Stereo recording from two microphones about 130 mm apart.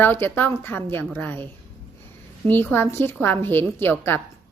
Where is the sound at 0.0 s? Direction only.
15° left (ahead or behind).